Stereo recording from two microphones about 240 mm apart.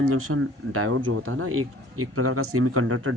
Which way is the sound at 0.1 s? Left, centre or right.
Right.